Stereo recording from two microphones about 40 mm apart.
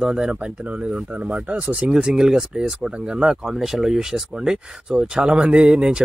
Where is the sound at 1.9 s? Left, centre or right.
Centre.